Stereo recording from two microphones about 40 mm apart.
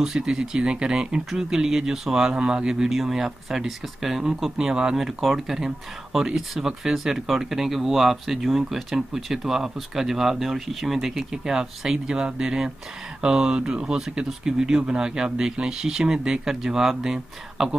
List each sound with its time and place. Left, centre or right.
0.0 s speech: centre